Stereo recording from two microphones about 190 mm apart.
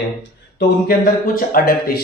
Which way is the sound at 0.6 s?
50° left (ahead or behind).